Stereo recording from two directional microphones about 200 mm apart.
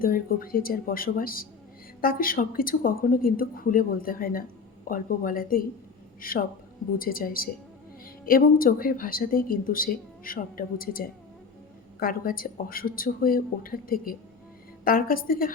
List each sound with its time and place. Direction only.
0.0 s speech: 45° left (ahead or behind)